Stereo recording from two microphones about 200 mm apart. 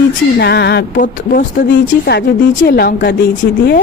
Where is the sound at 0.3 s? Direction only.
55° left (ahead or behind).